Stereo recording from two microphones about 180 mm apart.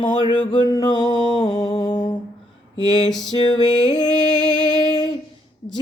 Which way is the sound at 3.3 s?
25° left (ahead or behind).